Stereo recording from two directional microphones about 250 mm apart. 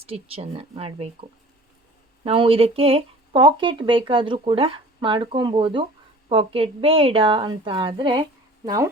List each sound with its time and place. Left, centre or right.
0.0 s speech: right
2.2 s speech: right